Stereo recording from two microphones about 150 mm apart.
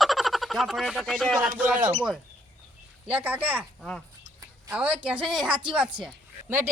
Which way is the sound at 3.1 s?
10° right (ahead or behind).